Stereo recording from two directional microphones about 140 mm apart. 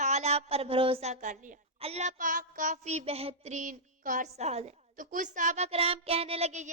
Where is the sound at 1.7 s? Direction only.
45° right (ahead or behind).